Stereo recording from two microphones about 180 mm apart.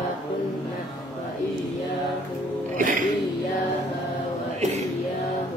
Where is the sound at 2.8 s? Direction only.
45° right (ahead or behind).